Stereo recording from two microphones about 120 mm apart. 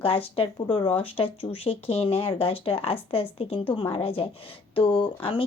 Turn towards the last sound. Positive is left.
turn(degrees=45)  # may be behind; listen again after turning